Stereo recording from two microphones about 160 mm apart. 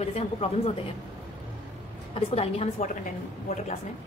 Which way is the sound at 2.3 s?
40° left (ahead or behind).